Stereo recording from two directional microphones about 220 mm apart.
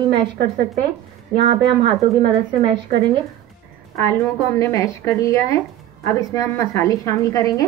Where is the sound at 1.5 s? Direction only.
25° right (ahead or behind).